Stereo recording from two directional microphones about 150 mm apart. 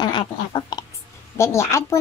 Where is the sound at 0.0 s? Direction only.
30° left (ahead or behind).